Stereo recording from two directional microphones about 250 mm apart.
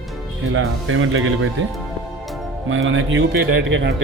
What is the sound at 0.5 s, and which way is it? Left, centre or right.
Speech, right.